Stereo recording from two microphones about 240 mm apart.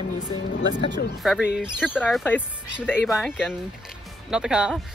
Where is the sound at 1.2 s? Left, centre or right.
Centre.